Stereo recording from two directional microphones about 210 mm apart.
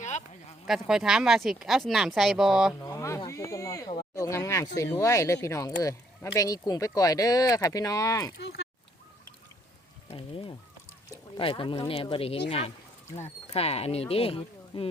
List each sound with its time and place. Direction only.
0.0 s a sound: 35° left (ahead or behind)
0.7 s speech: centre (ahead or behind)
2.8 s a sound: 15° left (ahead or behind)
3.2 s speech: 15° left (ahead or behind)
8.4 s speech: 55° left (ahead or behind)
10.1 s speech: 25° left (ahead or behind)